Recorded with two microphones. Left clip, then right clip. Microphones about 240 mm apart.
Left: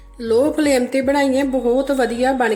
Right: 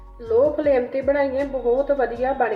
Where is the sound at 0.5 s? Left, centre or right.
Left.